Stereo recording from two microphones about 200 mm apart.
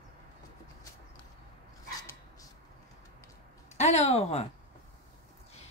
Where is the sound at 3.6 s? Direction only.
35° left (ahead or behind).